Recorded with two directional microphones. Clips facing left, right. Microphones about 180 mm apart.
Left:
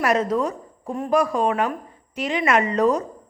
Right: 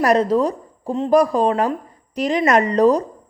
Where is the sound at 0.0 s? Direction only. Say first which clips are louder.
Right 5 dB; 35° right (ahead or behind).